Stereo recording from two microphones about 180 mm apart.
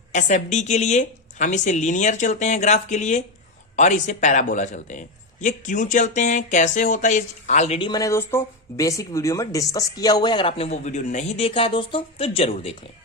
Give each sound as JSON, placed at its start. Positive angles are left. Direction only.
{"t": 0.1, "sound": "speech", "side_deg": 45}